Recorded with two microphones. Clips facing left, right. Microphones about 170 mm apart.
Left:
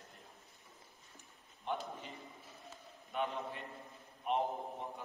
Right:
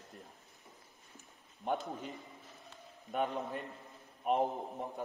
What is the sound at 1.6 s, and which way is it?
Speech, 45° right (ahead or behind).